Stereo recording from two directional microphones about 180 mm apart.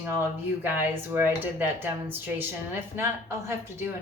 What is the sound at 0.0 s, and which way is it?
Speech, 10° right (ahead or behind).